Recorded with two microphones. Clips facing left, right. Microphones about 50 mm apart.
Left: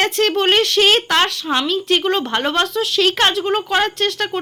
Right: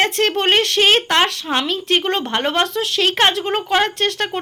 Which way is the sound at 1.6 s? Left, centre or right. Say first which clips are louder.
Left 1 dB; right.